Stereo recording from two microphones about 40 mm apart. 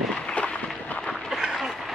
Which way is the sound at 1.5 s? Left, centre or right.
Centre.